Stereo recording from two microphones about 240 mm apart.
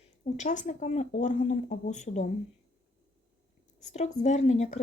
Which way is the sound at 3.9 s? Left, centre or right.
Left.